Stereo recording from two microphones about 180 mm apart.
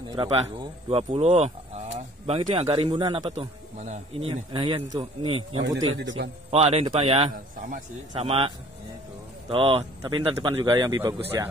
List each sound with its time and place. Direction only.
0.1 s a man's voice: 25° right (ahead or behind)
5.9 s a man's voice: 85° right
6.5 s a man's voice: 35° right (ahead or behind)
9.5 s speech: 35° right (ahead or behind)